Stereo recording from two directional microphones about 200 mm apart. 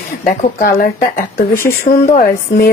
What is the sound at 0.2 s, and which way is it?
A woman's voice, 45° left (ahead or behind).